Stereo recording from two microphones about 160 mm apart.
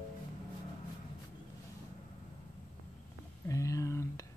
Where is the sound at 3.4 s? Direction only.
20° left (ahead or behind).